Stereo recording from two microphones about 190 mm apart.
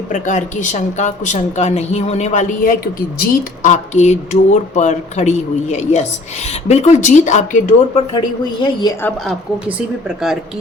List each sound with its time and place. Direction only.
0.1 s speech: 40° left (ahead or behind)
9.0 s a woman's voice: 10° left (ahead or behind)
9.7 s speech: centre (ahead or behind)